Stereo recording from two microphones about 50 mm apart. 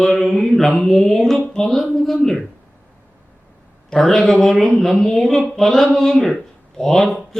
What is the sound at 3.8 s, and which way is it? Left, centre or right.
Speech, centre.